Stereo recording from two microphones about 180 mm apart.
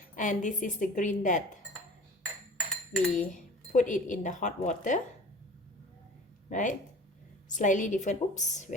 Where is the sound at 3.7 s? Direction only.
45° left (ahead or behind).